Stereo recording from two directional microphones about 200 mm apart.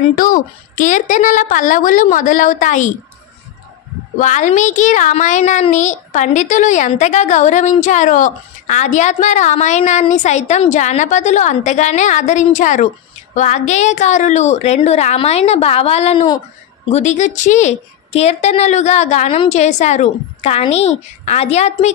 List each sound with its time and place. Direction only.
0.2 s a woman's voice: 40° left (ahead or behind)
4.2 s a woman's voice: 35° left (ahead or behind)